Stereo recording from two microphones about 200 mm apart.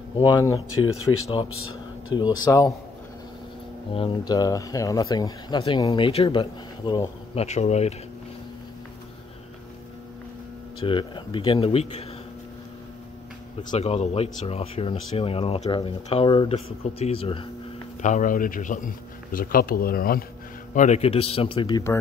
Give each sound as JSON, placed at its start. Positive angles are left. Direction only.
{"t": 0.2, "sound": "speech", "side_deg": 20}
{"t": 1.5, "sound": "a sound", "side_deg": 90}
{"t": 2.4, "sound": "a man's voice", "side_deg": 15}
{"t": 3.9, "sound": "speech", "side_deg": 25}
{"t": 7.4, "sound": "speech", "side_deg": 35}
{"t": 10.8, "sound": "speech", "side_deg": 25}
{"t": 13.6, "sound": "speech", "side_deg": 25}
{"t": 18.0, "sound": "speech", "side_deg": 40}
{"t": 20.7, "sound": "speech", "side_deg": 35}